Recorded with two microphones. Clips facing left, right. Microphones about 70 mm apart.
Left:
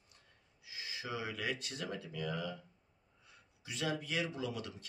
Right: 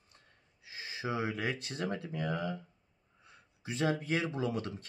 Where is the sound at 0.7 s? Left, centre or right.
Right.